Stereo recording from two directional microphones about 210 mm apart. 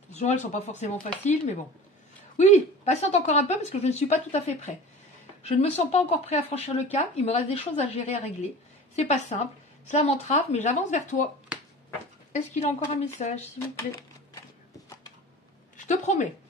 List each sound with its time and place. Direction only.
0.1 s speech: 35° left (ahead or behind)
12.3 s speech: 30° left (ahead or behind)
15.8 s speech: 35° left (ahead or behind)